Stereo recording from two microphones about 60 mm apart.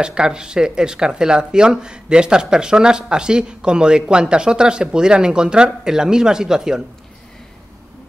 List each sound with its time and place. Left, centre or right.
0.0 s speech: centre